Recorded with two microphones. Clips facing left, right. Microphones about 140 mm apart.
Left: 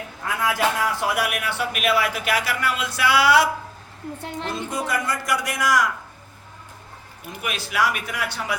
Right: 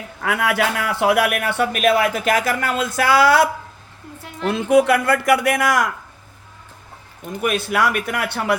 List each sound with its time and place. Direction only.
0.2 s a man's voice: 70° right (ahead or behind); by 3.5 s 50° right (ahead or behind)
4.4 s a man's voice: 70° right (ahead or behind)
7.4 s a man's voice: 55° right (ahead or behind)